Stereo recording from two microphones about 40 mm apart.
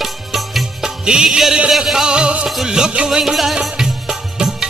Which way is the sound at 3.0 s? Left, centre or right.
Centre.